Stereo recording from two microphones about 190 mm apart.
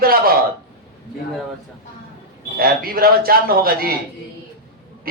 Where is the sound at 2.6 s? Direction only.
50° right (ahead or behind).